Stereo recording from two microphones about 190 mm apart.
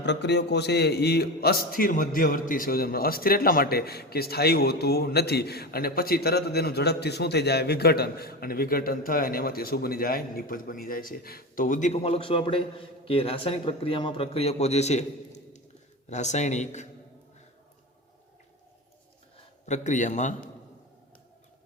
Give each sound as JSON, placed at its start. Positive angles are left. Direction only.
{"t": 0.0, "sound": "a man's voice", "side_deg": 65}
{"t": 19.6, "sound": "a man's voice", "side_deg": 40}